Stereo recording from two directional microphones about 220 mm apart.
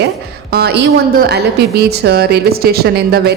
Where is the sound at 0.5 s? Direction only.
50° right (ahead or behind).